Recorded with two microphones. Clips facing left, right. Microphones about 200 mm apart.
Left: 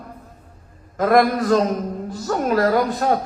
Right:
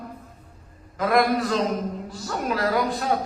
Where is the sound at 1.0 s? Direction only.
45° left (ahead or behind).